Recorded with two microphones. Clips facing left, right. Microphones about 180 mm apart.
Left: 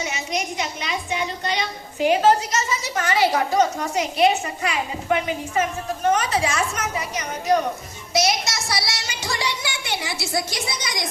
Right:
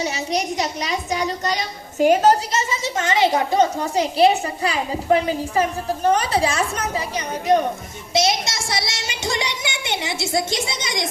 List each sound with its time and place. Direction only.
0.0 s a woman's voice: 35° right (ahead or behind)
2.5 s a child's voice: 25° right (ahead or behind)
8.1 s a sound: 25° right (ahead or behind)